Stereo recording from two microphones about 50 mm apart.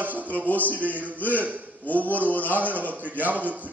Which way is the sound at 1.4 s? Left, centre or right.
Right.